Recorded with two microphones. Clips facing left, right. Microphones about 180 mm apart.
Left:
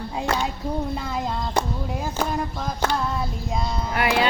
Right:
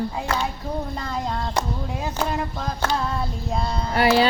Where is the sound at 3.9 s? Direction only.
30° right (ahead or behind).